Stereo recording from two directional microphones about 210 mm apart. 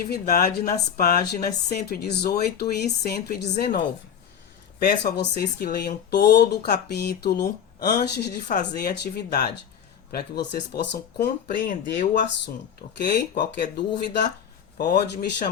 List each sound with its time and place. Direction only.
0.0 s speech: 45° left (ahead or behind)
4.8 s speech: 50° left (ahead or behind)
8.4 s speech: 40° left (ahead or behind)